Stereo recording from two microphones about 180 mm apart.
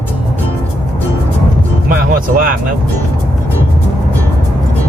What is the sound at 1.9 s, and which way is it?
Speech, 50° right (ahead or behind).